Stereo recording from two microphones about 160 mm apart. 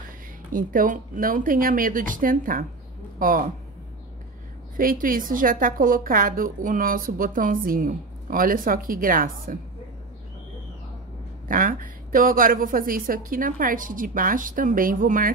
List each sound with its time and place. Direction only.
0.5 s a woman's voice: 60° right (ahead or behind)
4.7 s a woman's voice: 60° right (ahead or behind)
11.4 s a woman's voice: 60° right (ahead or behind)